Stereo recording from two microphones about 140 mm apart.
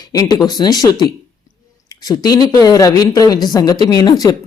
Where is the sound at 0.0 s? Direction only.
30° left (ahead or behind).